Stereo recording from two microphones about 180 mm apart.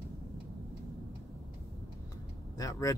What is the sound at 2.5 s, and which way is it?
Speech, 20° left (ahead or behind).